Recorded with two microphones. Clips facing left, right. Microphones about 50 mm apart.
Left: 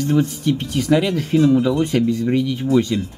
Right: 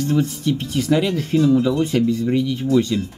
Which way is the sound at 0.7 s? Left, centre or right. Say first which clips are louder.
Left 1 dB; centre.